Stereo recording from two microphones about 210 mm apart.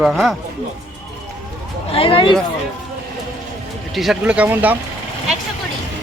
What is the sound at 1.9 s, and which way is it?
Speech, 25° left (ahead or behind).